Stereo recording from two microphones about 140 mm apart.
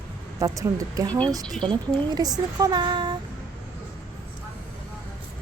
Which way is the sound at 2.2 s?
30° right (ahead or behind).